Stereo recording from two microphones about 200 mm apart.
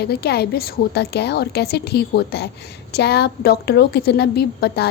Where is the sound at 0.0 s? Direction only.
55° left (ahead or behind).